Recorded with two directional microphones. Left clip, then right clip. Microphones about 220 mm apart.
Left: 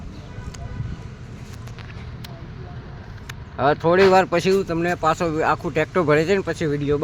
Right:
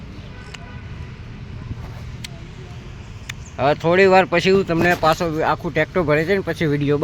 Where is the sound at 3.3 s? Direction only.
5° right (ahead or behind).